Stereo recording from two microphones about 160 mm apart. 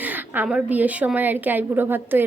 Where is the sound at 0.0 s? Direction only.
10° right (ahead or behind).